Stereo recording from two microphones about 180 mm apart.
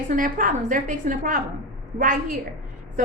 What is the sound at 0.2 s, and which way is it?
A woman's voice, 45° right (ahead or behind).